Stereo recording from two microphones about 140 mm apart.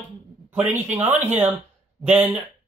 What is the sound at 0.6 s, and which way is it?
Speech, 60° right (ahead or behind).